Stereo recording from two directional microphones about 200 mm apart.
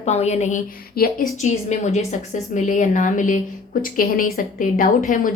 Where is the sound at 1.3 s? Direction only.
35° left (ahead or behind).